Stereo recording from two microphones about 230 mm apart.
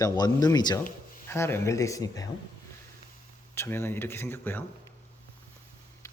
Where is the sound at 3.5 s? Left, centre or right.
Centre.